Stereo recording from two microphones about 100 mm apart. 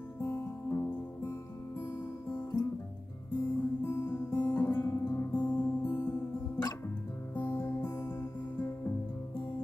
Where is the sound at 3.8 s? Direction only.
20° left (ahead or behind).